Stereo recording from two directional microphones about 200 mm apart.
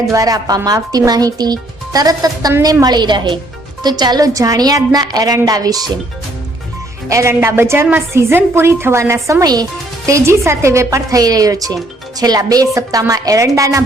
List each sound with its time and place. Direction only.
0.1 s speech: 15° right (ahead or behind)
7.1 s a woman's voice: 15° right (ahead or behind)